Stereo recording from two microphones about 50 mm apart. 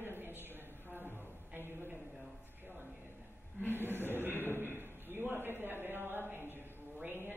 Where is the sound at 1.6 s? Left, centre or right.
Right.